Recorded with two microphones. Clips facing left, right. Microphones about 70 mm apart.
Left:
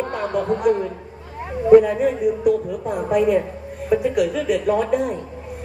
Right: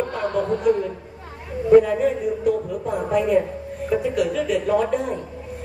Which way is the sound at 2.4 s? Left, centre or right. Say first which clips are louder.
Left 3 dB; centre.